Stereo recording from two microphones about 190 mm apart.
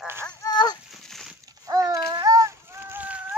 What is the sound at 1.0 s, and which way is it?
Dog, centre (ahead or behind).